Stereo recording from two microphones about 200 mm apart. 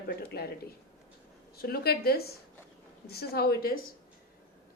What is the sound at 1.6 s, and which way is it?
Speech, 50° left (ahead or behind).